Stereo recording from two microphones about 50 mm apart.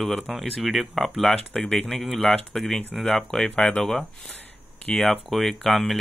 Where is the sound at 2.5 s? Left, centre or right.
Centre.